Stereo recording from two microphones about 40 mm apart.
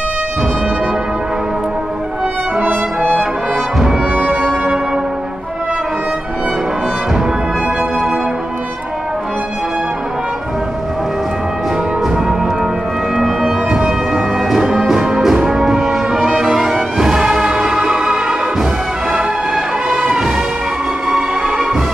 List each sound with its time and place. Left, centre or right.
2.6 s brass instrument: right
13.1 s music: centre
15.3 s brass instrument: centre
16.3 s music: centre
21.1 s music: centre